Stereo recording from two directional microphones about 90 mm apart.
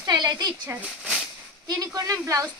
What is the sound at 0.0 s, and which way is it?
Speech, 50° right (ahead or behind).